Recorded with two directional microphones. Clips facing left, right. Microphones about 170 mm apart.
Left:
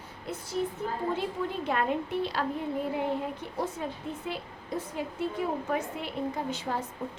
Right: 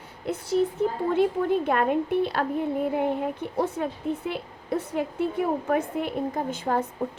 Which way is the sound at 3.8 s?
60° right (ahead or behind).